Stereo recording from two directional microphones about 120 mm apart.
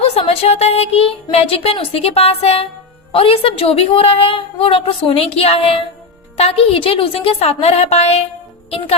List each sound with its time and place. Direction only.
0.0 s a woman's voice: 55° left (ahead or behind)